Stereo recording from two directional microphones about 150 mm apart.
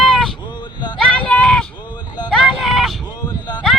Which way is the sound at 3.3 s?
30° left (ahead or behind).